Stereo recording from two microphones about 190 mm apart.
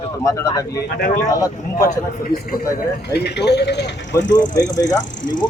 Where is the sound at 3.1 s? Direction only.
60° left (ahead or behind).